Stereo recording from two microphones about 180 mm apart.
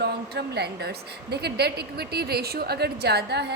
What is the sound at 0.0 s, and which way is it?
A woman's voice, 65° right (ahead or behind).